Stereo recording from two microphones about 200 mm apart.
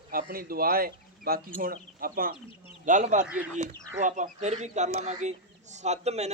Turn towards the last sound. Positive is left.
turn(degrees=-35)  # may be behind; listen again after turning